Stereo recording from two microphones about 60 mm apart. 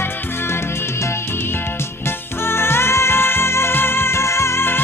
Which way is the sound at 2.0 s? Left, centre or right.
Left.